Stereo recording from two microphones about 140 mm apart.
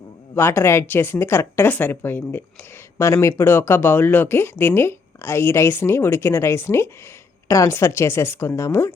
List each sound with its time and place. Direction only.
0.3 s speech: 15° left (ahead or behind)